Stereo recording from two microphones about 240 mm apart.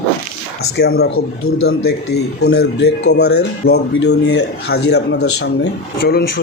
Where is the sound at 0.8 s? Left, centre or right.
Left.